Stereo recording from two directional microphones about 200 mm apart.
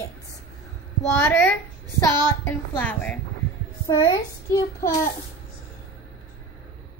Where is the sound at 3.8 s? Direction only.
20° left (ahead or behind).